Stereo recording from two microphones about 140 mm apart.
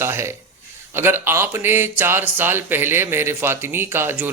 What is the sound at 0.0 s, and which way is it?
Speech, 20° right (ahead or behind).